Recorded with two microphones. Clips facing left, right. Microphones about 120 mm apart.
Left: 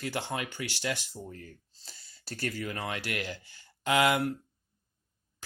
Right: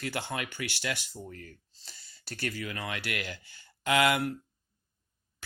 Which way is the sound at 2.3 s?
40° left (ahead or behind).